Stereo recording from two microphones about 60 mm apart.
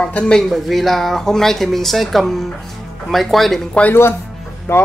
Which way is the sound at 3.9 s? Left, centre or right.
Left.